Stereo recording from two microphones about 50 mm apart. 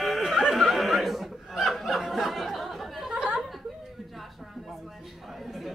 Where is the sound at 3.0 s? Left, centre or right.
Right.